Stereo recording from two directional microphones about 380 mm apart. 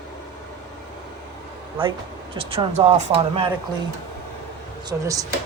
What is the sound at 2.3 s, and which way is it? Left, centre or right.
Speech, centre.